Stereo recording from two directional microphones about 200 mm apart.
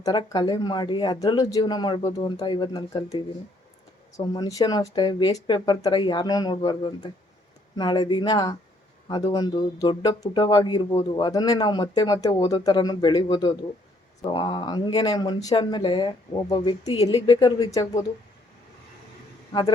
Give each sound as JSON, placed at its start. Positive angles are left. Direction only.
{"t": 0.0, "sound": "speech", "side_deg": 20}
{"t": 4.2, "sound": "speech", "side_deg": 20}